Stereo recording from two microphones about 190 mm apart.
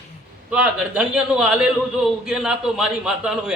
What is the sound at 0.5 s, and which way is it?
Speech, 5° right (ahead or behind).